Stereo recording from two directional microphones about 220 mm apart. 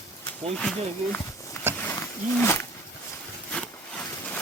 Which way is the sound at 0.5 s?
5° left (ahead or behind).